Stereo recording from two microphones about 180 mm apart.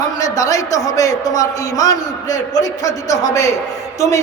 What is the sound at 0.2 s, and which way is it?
A man's voice, 20° left (ahead or behind).